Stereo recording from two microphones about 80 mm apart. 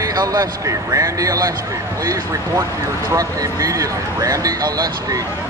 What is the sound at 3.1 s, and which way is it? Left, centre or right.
Speech, right.